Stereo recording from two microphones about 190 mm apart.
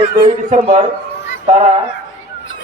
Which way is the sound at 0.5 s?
40° right (ahead or behind).